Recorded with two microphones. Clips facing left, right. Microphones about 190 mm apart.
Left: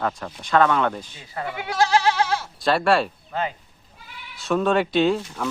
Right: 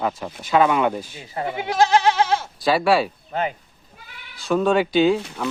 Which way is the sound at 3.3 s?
20° right (ahead or behind).